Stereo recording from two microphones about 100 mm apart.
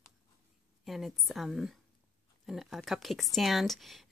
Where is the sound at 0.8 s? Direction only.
Centre (ahead or behind).